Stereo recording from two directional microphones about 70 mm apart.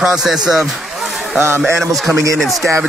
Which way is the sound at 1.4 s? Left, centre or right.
Right.